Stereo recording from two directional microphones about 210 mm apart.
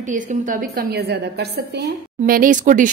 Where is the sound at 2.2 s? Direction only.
40° right (ahead or behind).